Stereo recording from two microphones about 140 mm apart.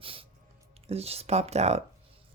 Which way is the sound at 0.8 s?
45° right (ahead or behind).